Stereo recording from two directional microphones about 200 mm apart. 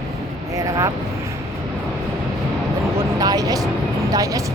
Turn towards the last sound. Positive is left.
turn(degrees=-15)  # may be behind; listen again after turning